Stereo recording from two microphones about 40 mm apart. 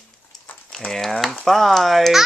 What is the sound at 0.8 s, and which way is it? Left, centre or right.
Speech, centre.